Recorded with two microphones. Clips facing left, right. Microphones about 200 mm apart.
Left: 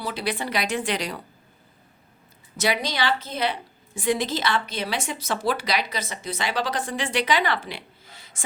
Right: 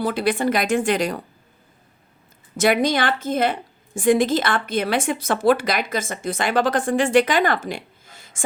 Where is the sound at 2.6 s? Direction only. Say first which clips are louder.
Right 7 dB; 50° right (ahead or behind).